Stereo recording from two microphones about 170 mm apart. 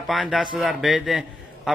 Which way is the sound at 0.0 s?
Centre (ahead or behind).